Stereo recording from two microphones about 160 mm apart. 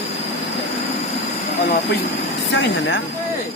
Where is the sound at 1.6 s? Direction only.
90° left.